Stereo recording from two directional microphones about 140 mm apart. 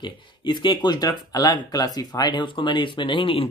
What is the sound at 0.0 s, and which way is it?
Speech, 35° left (ahead or behind).